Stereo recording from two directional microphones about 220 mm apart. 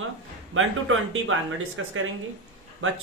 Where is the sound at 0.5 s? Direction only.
65° right (ahead or behind).